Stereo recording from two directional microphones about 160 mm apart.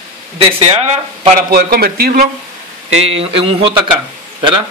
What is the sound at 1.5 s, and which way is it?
Speech, 75° right (ahead or behind).